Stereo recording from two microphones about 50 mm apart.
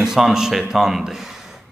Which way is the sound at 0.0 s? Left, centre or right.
Centre.